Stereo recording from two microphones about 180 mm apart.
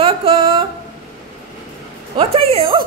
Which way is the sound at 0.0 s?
30° right (ahead or behind).